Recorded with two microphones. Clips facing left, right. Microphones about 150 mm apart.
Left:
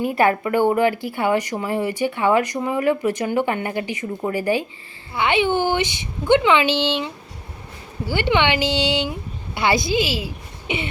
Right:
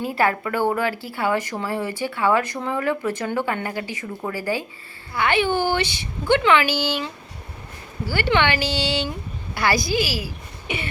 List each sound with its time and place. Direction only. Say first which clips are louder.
0.0 s speech: left 3 dB; 20° left (ahead or behind)